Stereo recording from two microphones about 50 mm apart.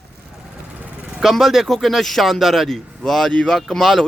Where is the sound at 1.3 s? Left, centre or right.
Centre.